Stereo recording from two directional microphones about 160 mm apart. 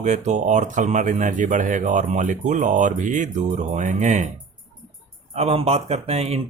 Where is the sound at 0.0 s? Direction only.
45° right (ahead or behind).